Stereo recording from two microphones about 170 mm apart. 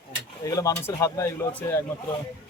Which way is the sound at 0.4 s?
20° left (ahead or behind).